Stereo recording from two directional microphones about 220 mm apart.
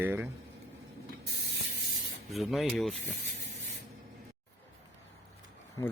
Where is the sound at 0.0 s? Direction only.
10° right (ahead or behind).